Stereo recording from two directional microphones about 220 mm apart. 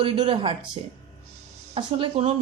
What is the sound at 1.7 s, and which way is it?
Speech, 25° right (ahead or behind).